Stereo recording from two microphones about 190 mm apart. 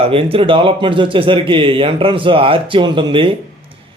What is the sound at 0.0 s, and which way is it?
A man's voice, 30° right (ahead or behind).